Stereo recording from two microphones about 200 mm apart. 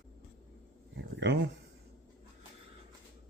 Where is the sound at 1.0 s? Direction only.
60° right (ahead or behind).